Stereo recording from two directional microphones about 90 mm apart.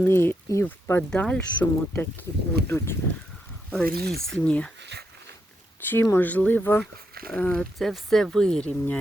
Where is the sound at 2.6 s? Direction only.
25° left (ahead or behind).